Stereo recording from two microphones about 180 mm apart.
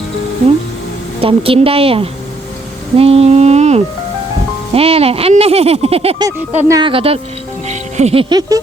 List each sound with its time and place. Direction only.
1.2 s speech: 30° right (ahead or behind)
6.2 s speech: 15° right (ahead or behind)
6.7 s speech: 30° right (ahead or behind)